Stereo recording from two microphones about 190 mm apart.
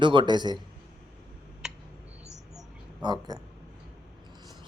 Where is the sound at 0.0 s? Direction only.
25° right (ahead or behind).